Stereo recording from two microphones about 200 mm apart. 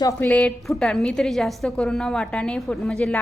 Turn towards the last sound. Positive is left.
turn(degrees=5)  # may be behind; listen again after turning